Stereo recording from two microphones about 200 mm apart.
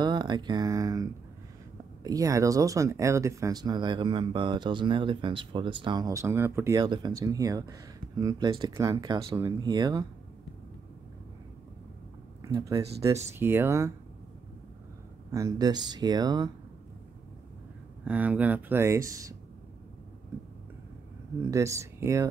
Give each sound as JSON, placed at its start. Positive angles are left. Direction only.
{"t": 0.0, "sound": "speech", "side_deg": -20}
{"t": 2.0, "sound": "speech", "side_deg": -15}
{"t": 12.4, "sound": "speech", "side_deg": -15}
{"t": 15.3, "sound": "speech", "side_deg": -20}
{"t": 18.0, "sound": "speech", "side_deg": -5}
{"t": 21.5, "sound": "speech", "side_deg": -15}